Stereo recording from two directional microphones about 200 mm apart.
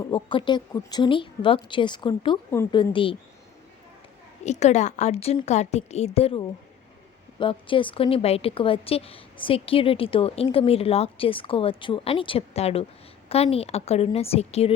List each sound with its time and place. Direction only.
0.0 s a woman's voice: 25° left (ahead or behind)
2.9 s a woman's voice: 25° left (ahead or behind)
4.4 s a woman's voice: 35° left (ahead or behind)